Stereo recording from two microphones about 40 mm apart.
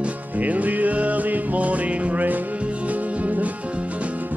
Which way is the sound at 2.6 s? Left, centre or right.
Right.